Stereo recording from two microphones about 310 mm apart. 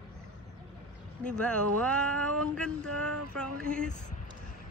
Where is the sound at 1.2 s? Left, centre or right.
Centre.